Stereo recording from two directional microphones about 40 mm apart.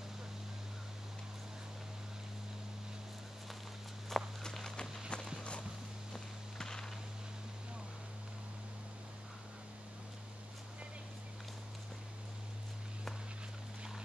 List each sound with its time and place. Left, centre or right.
4.1 s walk: centre
5.1 s walk: left
6.1 s walk: centre